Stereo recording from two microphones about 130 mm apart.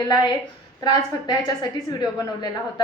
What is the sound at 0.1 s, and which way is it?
A woman's voice, 30° left (ahead or behind).